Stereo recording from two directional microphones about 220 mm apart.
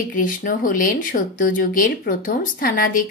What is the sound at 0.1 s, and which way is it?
Speech, 35° left (ahead or behind).